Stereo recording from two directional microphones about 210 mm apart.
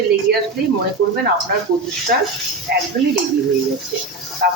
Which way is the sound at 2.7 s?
50° right (ahead or behind).